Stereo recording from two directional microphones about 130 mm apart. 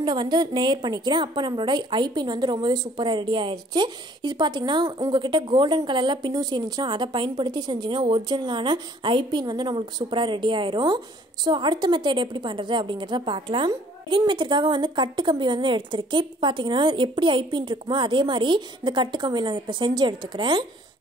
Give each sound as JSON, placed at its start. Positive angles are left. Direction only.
{"t": 0.0, "sound": "a woman's voice", "side_deg": -35}